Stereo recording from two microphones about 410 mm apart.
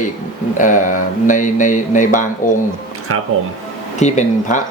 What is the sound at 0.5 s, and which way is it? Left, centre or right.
Speech, centre.